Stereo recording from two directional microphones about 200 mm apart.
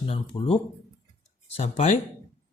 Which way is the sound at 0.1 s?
30° left (ahead or behind).